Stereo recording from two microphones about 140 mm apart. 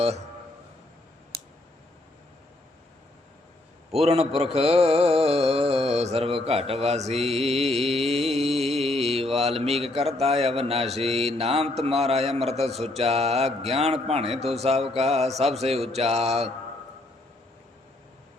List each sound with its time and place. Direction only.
3.9 s mantra: 45° right (ahead or behind)